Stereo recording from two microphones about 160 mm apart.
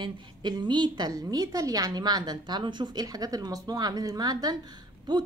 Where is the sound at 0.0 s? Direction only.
25° right (ahead or behind).